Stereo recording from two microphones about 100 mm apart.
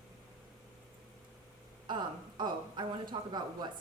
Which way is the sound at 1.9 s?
50° right (ahead or behind).